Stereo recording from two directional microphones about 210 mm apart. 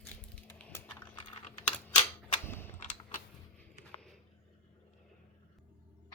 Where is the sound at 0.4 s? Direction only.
10° left (ahead or behind).